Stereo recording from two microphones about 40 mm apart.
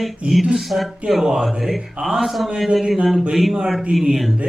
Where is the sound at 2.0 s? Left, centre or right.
Centre.